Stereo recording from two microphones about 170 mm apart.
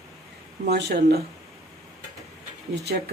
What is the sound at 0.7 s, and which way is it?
Speech, 80° right.